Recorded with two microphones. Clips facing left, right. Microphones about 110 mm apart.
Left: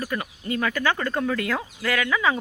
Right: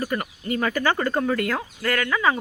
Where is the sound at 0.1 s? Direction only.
5° right (ahead or behind).